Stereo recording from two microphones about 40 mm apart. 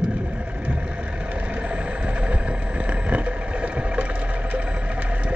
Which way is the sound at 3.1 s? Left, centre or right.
Right.